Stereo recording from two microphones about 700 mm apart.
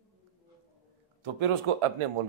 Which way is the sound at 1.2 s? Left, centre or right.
Right.